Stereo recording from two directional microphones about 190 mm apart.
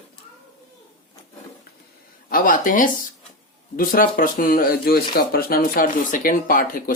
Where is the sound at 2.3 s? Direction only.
45° left (ahead or behind).